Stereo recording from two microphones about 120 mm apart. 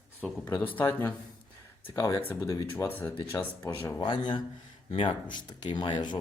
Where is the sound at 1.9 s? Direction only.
30° left (ahead or behind).